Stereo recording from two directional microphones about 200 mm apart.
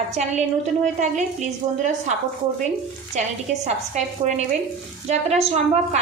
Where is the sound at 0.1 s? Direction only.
35° right (ahead or behind).